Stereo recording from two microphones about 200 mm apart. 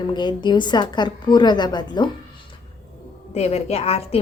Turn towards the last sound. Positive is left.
turn(degrees=30)  # may be behind; listen again after turning